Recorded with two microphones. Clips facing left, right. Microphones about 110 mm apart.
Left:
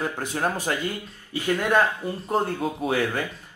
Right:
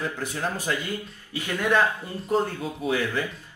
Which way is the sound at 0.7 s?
40° left (ahead or behind).